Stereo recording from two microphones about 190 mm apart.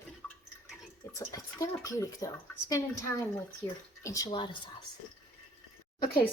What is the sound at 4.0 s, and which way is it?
Speech, 15° left (ahead or behind).